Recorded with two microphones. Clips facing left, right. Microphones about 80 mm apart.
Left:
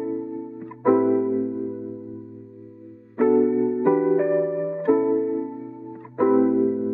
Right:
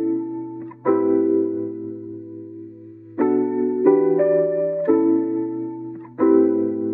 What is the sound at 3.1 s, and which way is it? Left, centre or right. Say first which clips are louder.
Music: left 1 dB; centre.